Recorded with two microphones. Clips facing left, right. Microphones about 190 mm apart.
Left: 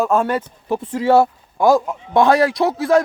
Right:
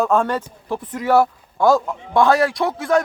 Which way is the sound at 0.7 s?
30° left (ahead or behind).